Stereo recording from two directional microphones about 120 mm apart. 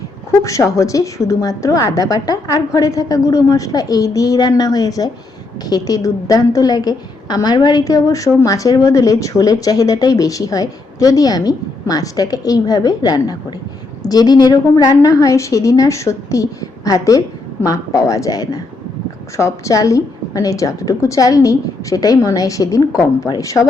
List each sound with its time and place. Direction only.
0.3 s a woman's voice: 25° left (ahead or behind)